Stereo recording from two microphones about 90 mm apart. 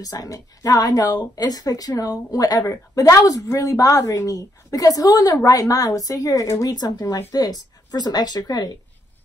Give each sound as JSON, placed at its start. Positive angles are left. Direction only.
{"t": 0.0, "sound": "speech", "side_deg": 40}
{"t": 6.7, "sound": "a woman's voice", "side_deg": 50}